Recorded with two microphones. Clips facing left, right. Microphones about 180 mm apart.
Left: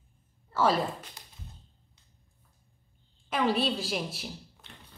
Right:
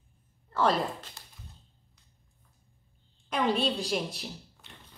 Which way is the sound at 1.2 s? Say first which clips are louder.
Left 1 dB; 15° left (ahead or behind).